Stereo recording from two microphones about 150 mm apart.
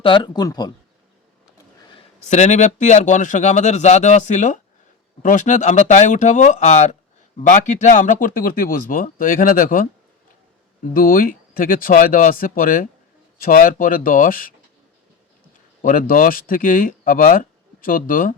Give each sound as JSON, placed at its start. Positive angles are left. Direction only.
{"t": 0.0, "sound": "speech", "side_deg": 35}
{"t": 2.3, "sound": "a man's voice", "side_deg": 50}
{"t": 10.9, "sound": "speech", "side_deg": 70}
{"t": 15.8, "sound": "speech", "side_deg": 65}